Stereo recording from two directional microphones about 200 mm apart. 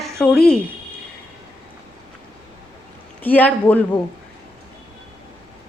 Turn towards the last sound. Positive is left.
turn(degrees=10)  # may be behind; listen again after turning